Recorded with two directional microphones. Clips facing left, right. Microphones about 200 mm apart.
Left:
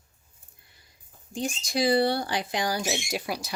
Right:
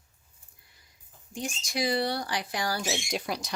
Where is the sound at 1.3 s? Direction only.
30° left (ahead or behind); by 3.5 s 5° left (ahead or behind).